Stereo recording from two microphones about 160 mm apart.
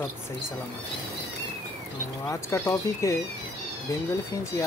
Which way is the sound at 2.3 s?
20° left (ahead or behind).